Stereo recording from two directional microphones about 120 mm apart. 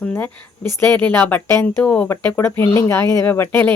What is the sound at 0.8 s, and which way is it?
Speech, 10° left (ahead or behind).